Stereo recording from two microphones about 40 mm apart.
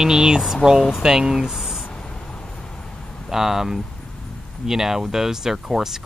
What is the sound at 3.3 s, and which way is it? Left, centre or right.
Speech, centre.